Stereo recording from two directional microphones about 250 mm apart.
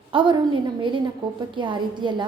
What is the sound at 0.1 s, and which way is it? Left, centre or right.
A woman's voice, centre.